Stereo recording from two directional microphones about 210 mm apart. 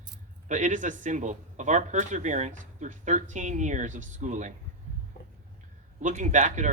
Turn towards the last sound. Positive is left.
turn(degrees=-35)  # may be behind; listen again after turning